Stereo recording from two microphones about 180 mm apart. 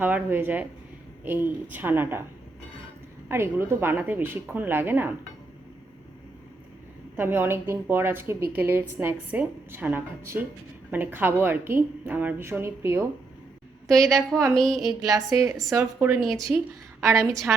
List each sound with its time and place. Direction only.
0.0 s a woman's voice: 10° right (ahead or behind)
3.2 s a woman's voice: 15° right (ahead or behind)
7.2 s a woman's voice: 10° right (ahead or behind)
14.2 s a woman's voice: 15° right (ahead or behind)
14.5 s speech: centre (ahead or behind)
15.0 s a woman's voice: 20° right (ahead or behind)
16.2 s speech: centre (ahead or behind)
17.0 s a woman's voice: 15° right (ahead or behind)